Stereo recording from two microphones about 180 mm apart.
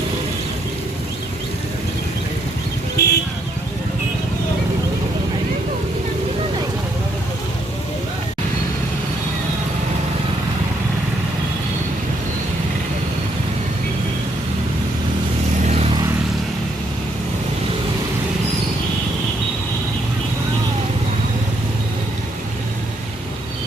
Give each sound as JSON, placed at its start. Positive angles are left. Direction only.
{"t": 3.0, "sound": "vehicle", "side_deg": 65}
{"t": 15.6, "sound": "vehicle", "side_deg": -35}